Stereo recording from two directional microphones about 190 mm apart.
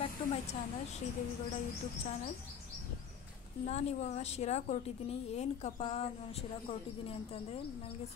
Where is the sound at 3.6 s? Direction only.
35° left (ahead or behind).